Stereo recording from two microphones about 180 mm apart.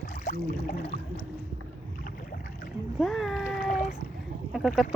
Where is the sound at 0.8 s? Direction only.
35° left (ahead or behind).